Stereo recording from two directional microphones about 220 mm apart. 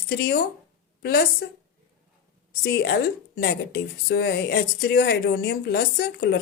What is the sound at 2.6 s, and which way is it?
A woman's voice, 45° left (ahead or behind).